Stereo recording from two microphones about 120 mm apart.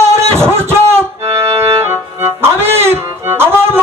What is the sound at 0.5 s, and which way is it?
Music, 20° right (ahead or behind).